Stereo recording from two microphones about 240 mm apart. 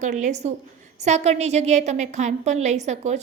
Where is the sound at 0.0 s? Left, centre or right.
Right.